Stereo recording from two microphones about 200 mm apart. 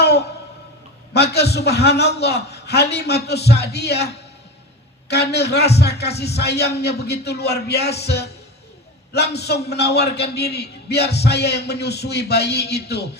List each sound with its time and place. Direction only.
0.0 s music: 55° left (ahead or behind)
1.1 s a man's voice: 55° left (ahead or behind)